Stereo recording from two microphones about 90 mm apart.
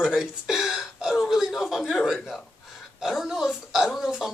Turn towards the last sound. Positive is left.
turn(degrees=-5)  # may be behind; listen again after turning